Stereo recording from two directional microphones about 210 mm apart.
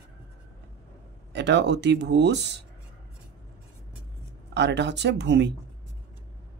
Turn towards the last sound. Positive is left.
turn(degrees=-55)  # may be behind; listen again after turning